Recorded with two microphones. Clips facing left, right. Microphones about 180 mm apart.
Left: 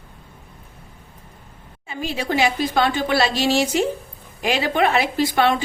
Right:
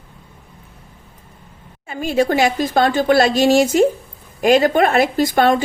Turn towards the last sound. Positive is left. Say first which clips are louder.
# right 4 dB
turn(degrees=-45)  # may be behind; listen again after turning